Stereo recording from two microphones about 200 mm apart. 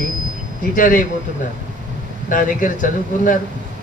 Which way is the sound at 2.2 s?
40° left (ahead or behind).